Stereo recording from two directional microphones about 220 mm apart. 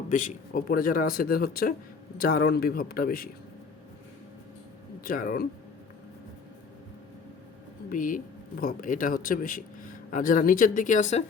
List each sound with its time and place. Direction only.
0.1 s a man's voice: 35° left (ahead or behind)
5.0 s speech: 40° left (ahead or behind)
7.9 s speech: 35° left (ahead or behind)